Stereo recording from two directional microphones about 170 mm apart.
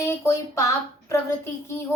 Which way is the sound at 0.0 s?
15° left (ahead or behind).